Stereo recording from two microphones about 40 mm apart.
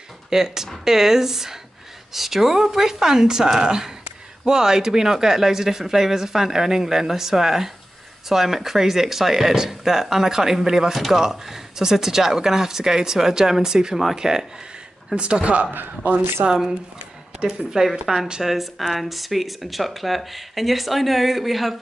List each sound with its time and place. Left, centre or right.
0.3 s speech: centre
15.1 s speech: right
15.7 s a man's voice: right
17.6 s speech: centre